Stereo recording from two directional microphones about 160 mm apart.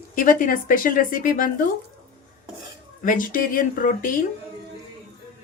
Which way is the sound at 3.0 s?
60° left (ahead or behind).